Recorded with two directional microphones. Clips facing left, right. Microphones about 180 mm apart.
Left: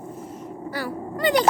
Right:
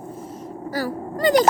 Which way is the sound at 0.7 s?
40° right (ahead or behind).